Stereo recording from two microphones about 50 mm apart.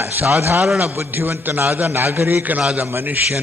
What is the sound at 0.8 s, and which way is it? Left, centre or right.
A man's voice, right.